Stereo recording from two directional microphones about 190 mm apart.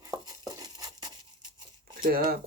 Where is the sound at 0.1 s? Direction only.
20° right (ahead or behind).